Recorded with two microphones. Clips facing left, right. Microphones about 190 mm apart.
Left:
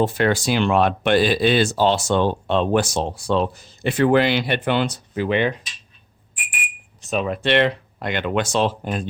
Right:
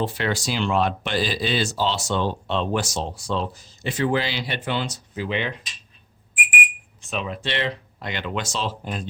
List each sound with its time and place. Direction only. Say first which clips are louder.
0.0 s speech: left 6 dB; 50° left (ahead or behind)
7.1 s speech: left 8 dB; 50° left (ahead or behind)